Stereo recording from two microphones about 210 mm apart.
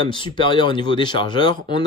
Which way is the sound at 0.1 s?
25° left (ahead or behind).